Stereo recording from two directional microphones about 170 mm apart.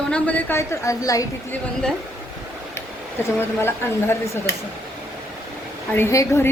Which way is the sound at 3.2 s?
15° left (ahead or behind).